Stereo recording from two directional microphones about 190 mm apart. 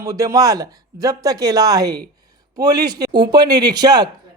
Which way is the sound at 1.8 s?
60° right (ahead or behind).